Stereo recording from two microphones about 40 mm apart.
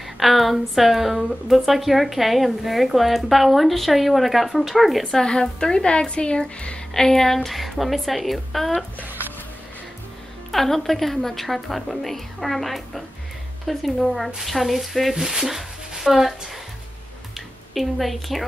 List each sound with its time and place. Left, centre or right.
0.2 s a woman's voice: centre
5.1 s a woman's voice: centre
6.9 s a woman's voice: centre
10.5 s a woman's voice: centre
17.7 s a woman's voice: centre